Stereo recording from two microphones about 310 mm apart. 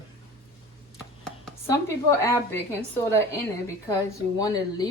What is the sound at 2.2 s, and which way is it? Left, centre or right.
A woman's voice, centre.